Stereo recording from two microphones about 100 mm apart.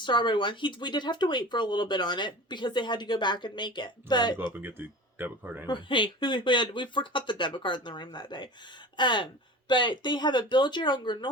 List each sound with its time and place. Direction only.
0.0 s speech: 50° left (ahead or behind)
4.5 s speech: 20° right (ahead or behind)
5.6 s speech: 55° left (ahead or behind)